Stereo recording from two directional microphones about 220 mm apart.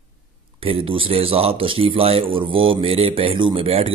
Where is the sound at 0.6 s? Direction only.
25° right (ahead or behind).